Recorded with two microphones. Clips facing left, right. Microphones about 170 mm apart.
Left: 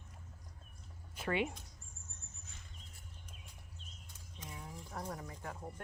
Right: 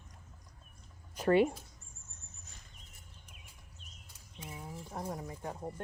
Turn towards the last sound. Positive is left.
turn(degrees=-25)  # may be behind; listen again after turning